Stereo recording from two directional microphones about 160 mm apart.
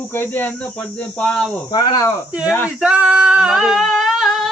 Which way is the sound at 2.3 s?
5° right (ahead or behind).